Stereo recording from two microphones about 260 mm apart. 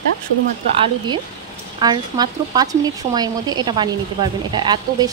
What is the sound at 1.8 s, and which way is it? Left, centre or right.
A woman's voice, centre.